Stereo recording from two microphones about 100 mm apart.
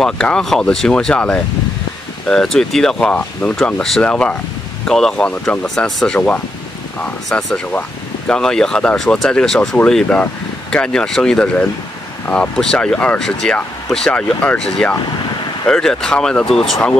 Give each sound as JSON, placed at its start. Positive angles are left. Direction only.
{"t": 0.0, "sound": "speech", "side_deg": 5}